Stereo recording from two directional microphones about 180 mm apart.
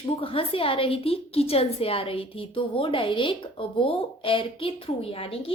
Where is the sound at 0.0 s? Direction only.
30° left (ahead or behind).